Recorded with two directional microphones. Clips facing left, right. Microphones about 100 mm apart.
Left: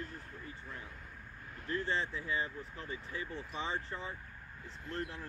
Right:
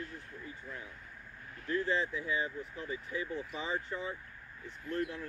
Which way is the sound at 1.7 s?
30° left (ahead or behind).